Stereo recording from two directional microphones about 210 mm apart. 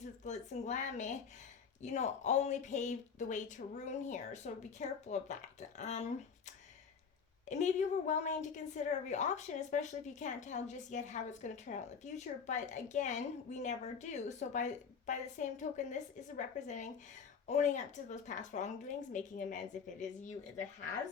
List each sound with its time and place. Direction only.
0.0 s a woman's voice: 35° left (ahead or behind)
7.4 s a woman's voice: 35° left (ahead or behind)